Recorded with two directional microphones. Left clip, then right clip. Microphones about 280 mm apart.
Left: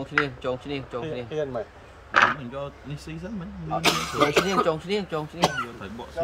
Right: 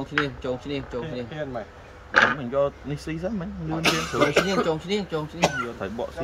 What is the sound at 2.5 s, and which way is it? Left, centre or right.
Speech, centre.